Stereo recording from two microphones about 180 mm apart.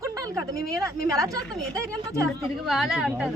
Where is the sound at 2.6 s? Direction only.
Centre (ahead or behind).